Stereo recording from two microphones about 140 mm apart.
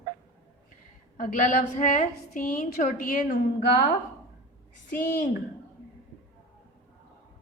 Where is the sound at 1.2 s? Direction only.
65° left (ahead or behind).